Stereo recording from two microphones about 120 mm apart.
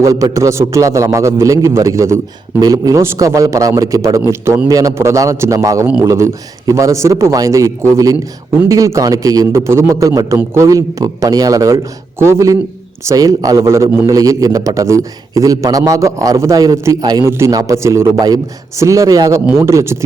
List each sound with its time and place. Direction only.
0.0 s a man's voice: 25° right (ahead or behind)